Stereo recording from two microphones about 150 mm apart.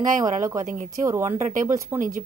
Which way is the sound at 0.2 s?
20° right (ahead or behind).